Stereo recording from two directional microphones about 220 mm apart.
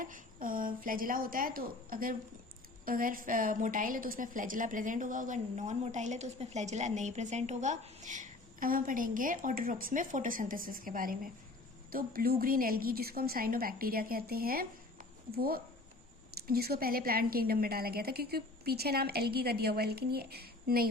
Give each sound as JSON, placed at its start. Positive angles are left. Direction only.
{"t": 0.0, "sound": "a woman's voice", "side_deg": -40}